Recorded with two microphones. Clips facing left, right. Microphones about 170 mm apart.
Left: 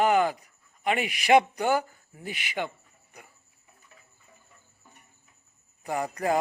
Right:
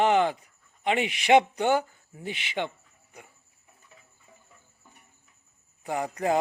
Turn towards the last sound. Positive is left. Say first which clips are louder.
# even
turn(degrees=-10)  # may be behind; listen again after turning